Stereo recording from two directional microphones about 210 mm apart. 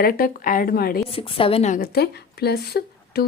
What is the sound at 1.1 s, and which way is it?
Speech, 25° left (ahead or behind).